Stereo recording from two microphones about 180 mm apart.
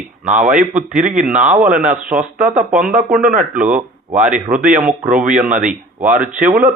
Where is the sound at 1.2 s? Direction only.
5° right (ahead or behind).